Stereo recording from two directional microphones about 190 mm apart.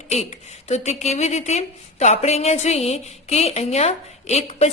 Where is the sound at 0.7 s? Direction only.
35° left (ahead or behind).